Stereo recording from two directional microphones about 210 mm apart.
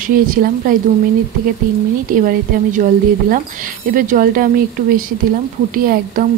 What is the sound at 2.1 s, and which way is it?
Speech, 40° right (ahead or behind).